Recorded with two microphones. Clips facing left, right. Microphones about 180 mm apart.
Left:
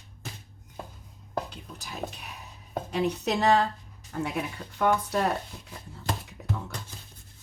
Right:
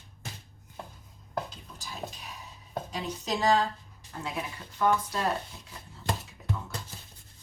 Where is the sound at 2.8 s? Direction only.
65° left (ahead or behind).